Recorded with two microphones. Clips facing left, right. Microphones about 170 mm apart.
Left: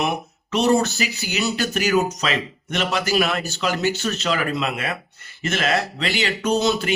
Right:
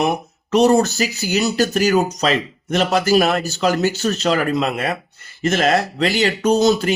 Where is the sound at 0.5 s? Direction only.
40° right (ahead or behind).